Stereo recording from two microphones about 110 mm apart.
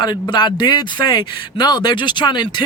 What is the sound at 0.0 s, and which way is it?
Speech, 40° left (ahead or behind).